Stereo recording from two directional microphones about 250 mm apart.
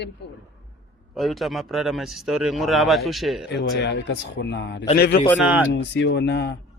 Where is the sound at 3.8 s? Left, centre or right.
Left.